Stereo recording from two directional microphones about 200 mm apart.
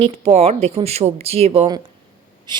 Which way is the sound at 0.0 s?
30° right (ahead or behind).